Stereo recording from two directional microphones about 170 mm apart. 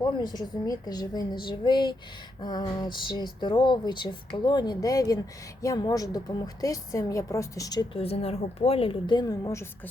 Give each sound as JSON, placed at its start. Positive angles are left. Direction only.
{"t": 0.0, "sound": "speech", "side_deg": 25}
{"t": 7.9, "sound": "a woman's voice", "side_deg": 35}